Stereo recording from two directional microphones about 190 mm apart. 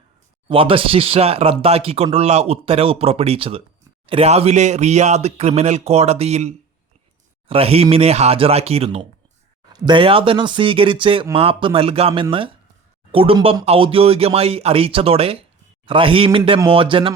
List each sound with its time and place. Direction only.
0.4 s speech: 30° right (ahead or behind)